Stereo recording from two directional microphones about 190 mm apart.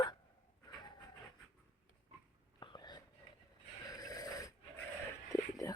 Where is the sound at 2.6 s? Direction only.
20° left (ahead or behind).